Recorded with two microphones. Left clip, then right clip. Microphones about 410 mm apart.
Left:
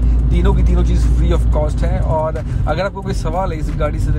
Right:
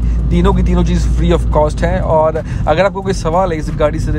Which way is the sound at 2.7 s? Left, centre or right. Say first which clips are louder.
Right 8 dB; centre.